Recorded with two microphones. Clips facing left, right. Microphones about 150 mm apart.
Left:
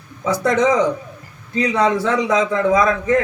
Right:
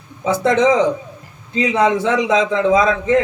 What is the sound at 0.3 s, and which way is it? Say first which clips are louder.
Speech: right 2 dB; 25° right (ahead or behind).